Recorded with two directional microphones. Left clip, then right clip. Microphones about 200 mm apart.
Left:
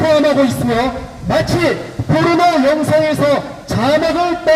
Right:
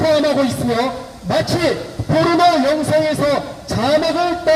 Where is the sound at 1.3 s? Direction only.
20° left (ahead or behind).